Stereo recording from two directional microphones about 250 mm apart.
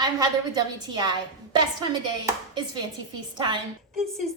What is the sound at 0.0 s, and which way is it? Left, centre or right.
Speech, centre.